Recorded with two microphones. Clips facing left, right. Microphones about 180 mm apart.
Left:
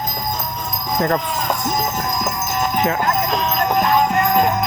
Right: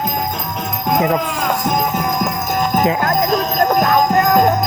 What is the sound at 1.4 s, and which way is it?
Clip-clop, 55° right (ahead or behind).